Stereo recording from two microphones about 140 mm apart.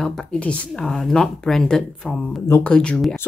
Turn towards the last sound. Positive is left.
turn(degrees=5)  # may be behind; listen again after turning